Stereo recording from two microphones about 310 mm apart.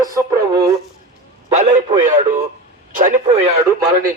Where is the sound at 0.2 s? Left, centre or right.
Centre.